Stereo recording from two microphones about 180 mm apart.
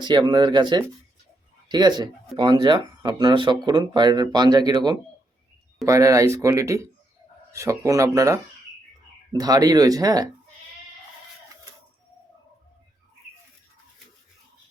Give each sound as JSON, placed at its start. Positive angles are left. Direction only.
{"t": 0.0, "sound": "speech", "side_deg": -25}